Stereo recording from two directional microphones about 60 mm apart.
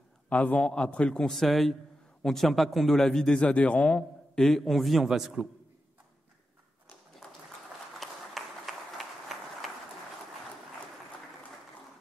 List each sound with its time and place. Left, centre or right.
0.3 s a man's voice: left
1.3 s a man's voice: centre
8.0 s run: centre